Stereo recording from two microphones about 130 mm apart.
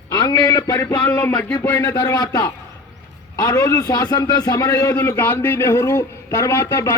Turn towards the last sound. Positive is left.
turn(degrees=25)  # may be behind; listen again after turning